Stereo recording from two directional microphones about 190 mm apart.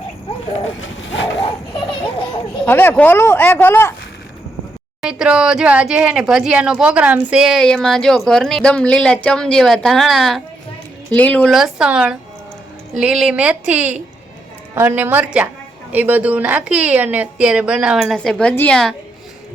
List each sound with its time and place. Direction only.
1.4 s children playing: 25° left (ahead or behind)
2.6 s speech: 10° left (ahead or behind)
5.0 s a woman's voice: 5° right (ahead or behind)